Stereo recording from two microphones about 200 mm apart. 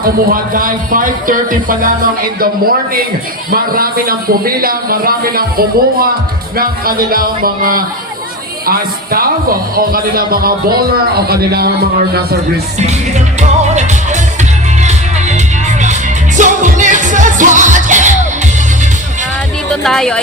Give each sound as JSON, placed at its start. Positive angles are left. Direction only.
{"t": 0.0, "sound": "a man's voice", "side_deg": -45}
{"t": 13.7, "sound": "music", "side_deg": -35}
{"t": 16.4, "sound": "music", "side_deg": -40}
{"t": 19.7, "sound": "speech", "side_deg": 0}